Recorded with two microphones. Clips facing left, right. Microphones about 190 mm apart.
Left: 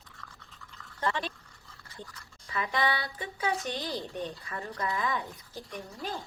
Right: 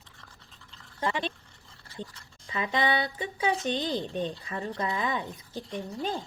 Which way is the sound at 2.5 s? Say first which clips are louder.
Right 3 dB; 20° right (ahead or behind).